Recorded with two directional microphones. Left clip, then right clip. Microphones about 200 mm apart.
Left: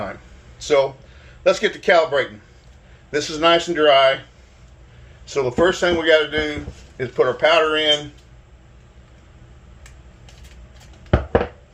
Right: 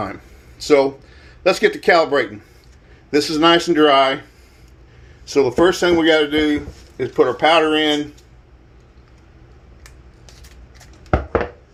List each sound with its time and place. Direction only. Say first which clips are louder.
0.6 s a man's voice: right 3 dB; 55° right (ahead or behind)
5.3 s speech: right 3 dB; 50° right (ahead or behind)